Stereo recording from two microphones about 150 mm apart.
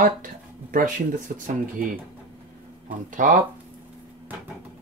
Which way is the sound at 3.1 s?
65° right (ahead or behind).